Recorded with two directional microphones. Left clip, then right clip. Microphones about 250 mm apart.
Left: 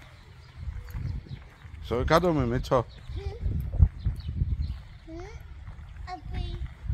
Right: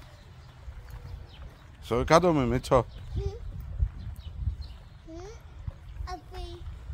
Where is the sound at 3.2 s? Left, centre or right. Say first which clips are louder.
Right 4 dB; centre.